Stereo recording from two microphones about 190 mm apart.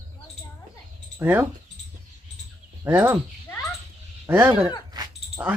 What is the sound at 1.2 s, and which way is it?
Speech, 10° right (ahead or behind).